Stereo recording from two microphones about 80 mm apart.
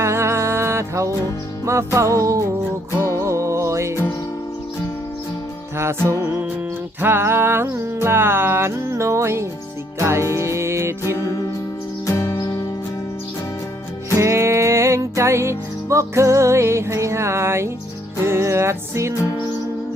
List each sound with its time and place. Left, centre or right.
0.0 s music: right
5.7 s music: right
12.0 s music: left
14.2 s music: right